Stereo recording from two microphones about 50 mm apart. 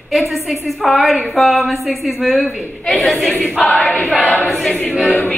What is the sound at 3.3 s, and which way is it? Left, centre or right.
Choir, left.